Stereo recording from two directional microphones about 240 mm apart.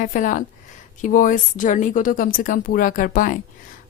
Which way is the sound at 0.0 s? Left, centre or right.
Left.